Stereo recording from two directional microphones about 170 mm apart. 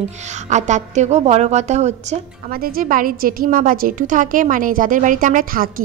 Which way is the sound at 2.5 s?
60° right (ahead or behind).